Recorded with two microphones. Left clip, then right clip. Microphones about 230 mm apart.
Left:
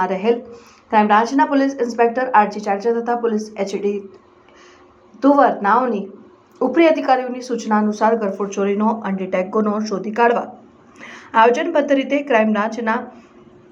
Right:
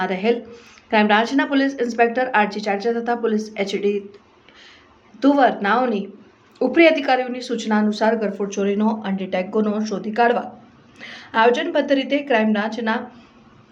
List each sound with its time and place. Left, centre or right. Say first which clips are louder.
0.3 s a woman's voice: left 2 dB; centre
5.4 s speech: left 2 dB; centre
7.3 s a woman's voice: left 2 dB; centre
7.9 s speech: left 3 dB; centre